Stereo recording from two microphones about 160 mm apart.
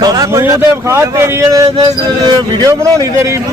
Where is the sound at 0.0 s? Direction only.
25° right (ahead or behind).